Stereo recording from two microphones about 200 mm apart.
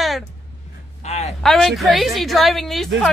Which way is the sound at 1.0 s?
35° left (ahead or behind).